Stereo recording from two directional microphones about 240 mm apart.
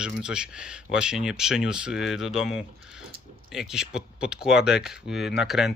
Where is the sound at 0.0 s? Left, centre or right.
Centre.